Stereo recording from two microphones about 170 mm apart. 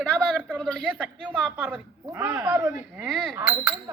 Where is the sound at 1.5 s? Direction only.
10° right (ahead or behind).